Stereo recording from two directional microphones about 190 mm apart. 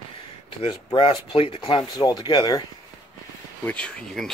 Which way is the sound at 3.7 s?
5° left (ahead or behind).